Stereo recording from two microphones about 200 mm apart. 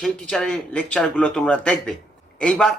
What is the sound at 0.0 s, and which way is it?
Speech, 5° left (ahead or behind).